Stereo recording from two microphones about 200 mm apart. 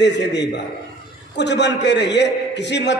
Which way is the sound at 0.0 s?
60° left (ahead or behind).